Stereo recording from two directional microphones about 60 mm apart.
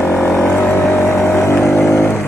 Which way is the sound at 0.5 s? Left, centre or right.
Left.